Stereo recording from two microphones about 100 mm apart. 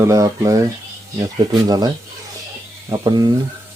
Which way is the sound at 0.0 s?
30° right (ahead or behind).